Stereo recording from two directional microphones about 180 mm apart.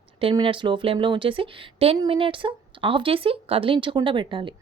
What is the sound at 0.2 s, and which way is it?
Speech, 30° right (ahead or behind).